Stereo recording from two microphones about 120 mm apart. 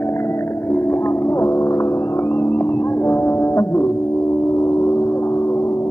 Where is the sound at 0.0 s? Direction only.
20° left (ahead or behind).